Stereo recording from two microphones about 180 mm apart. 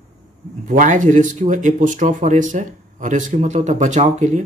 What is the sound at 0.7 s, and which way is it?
Speech, 45° right (ahead or behind).